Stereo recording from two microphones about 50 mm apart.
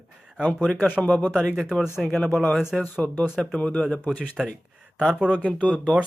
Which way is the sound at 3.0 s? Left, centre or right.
Centre.